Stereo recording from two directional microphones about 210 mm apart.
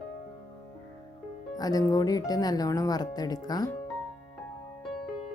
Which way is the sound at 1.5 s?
15° left (ahead or behind).